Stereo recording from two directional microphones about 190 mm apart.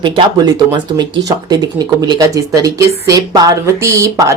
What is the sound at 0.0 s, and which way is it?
Speech, 20° right (ahead or behind).